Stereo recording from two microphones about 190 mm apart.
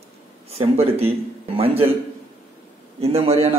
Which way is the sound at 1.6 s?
30° right (ahead or behind).